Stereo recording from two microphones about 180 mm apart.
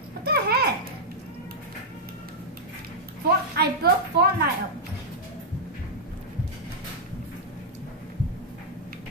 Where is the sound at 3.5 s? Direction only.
60° right (ahead or behind).